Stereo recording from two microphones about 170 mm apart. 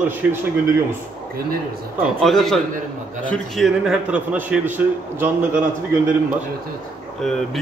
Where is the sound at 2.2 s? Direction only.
Centre (ahead or behind).